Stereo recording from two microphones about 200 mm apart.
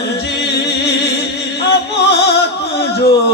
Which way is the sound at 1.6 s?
55° left (ahead or behind).